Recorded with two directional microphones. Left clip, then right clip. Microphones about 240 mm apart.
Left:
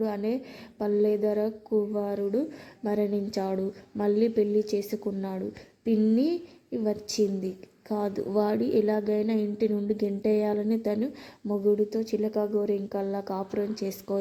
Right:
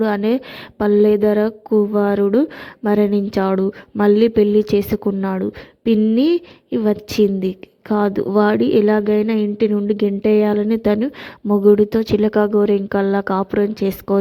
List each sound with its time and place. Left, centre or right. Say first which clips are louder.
0.0 s a woman's voice: right 12 dB; right
11.4 s a woman's voice: right 12 dB; right